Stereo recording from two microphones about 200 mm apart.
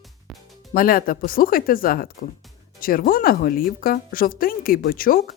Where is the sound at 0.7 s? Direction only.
45° left (ahead or behind).